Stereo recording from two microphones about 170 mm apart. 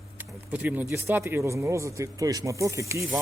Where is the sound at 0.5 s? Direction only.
10° right (ahead or behind).